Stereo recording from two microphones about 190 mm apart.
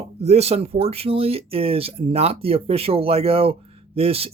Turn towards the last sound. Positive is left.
turn(degrees=-30)  # may be behind; listen again after turning